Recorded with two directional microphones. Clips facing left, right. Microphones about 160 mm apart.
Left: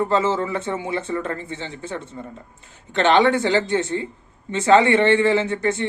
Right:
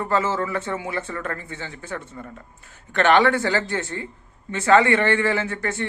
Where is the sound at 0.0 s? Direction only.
20° left (ahead or behind).